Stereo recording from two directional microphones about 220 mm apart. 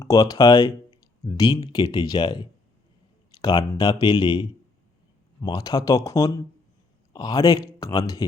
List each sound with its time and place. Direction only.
0.0 s speech: 15° left (ahead or behind)